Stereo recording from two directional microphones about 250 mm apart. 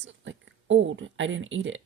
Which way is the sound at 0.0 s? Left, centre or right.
Right.